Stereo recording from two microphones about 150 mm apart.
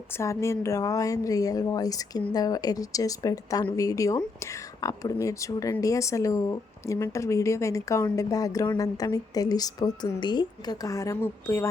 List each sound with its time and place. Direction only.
0.2 s speech: 20° left (ahead or behind)